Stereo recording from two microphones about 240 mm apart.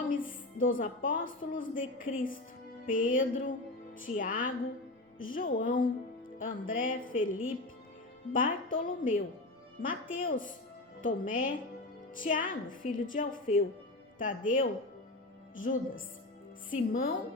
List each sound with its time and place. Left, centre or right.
0.1 s music: left
1.3 s a woman's voice: left